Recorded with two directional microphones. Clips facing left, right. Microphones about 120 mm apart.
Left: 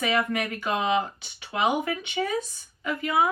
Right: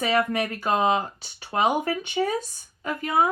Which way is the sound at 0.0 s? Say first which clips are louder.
Right 2 dB; 30° right (ahead or behind).